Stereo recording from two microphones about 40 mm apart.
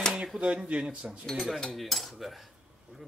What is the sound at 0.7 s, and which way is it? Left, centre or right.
Speech, right.